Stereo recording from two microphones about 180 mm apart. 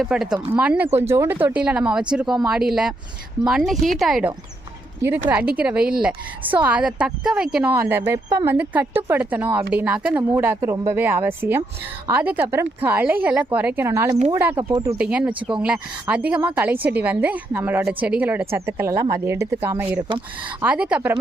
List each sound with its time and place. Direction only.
0.0 s a woman's voice: centre (ahead or behind); by 14.9 s 25° right (ahead or behind)
14.9 s a woman's voice: 5° right (ahead or behind)